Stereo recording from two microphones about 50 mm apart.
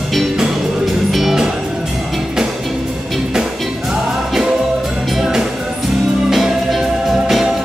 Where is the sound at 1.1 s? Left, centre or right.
Centre.